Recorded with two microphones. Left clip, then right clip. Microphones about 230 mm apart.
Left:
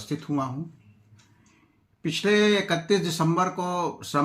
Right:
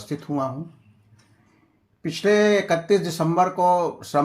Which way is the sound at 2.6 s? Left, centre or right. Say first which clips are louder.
Right 4 dB; centre.